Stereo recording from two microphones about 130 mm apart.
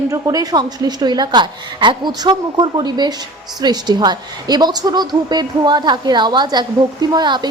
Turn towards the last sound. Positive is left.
turn(degrees=-35)  # may be behind; listen again after turning